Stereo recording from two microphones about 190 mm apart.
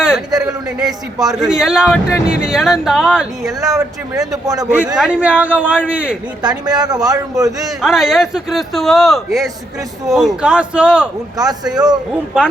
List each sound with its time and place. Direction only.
0.0 s a sound: 5° right (ahead or behind)
0.9 s a man's voice: 20° right (ahead or behind)
1.4 s speech: 5° right (ahead or behind)
3.6 s a man's voice: 15° right (ahead or behind)
4.9 s speech: 5° right (ahead or behind)
6.7 s a man's voice: 20° right (ahead or behind)
7.8 s speech: centre (ahead or behind)
11.3 s a man's voice: 20° right (ahead or behind)